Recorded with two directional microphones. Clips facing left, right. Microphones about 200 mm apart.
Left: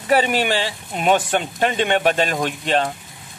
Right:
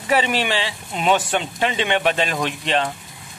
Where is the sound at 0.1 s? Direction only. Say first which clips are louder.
Left 2 dB; 45° left (ahead or behind).